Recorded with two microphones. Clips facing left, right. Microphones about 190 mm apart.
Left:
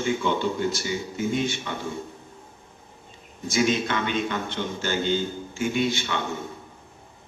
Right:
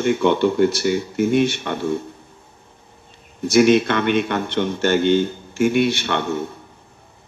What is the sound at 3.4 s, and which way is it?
Speech, 70° right (ahead or behind).